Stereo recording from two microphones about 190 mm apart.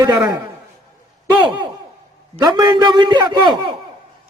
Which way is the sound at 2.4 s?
20° right (ahead or behind).